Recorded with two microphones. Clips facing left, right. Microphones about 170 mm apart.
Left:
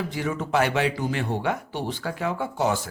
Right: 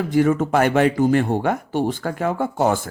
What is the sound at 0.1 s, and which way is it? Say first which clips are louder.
Speech: right 13 dB; 50° right (ahead or behind).